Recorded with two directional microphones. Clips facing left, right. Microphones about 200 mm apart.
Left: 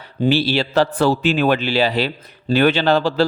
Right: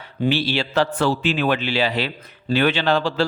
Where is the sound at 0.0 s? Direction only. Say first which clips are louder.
Left 4 dB; 35° left (ahead or behind).